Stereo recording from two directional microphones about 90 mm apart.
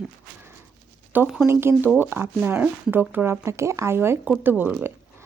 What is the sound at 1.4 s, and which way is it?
A woman's voice, 25° right (ahead or behind).